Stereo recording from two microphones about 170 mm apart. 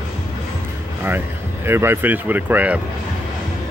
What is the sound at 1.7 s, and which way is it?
Speech, 15° right (ahead or behind).